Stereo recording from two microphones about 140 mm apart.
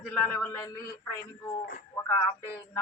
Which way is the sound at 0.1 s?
10° left (ahead or behind).